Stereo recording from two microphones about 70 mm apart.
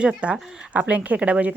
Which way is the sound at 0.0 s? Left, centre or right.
Centre.